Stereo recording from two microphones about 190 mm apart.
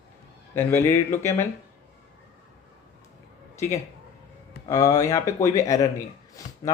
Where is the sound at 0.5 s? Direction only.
10° left (ahead or behind).